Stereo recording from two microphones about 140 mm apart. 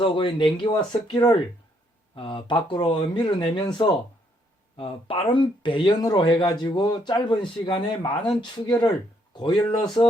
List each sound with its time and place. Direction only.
0.0 s speech: 35° left (ahead or behind)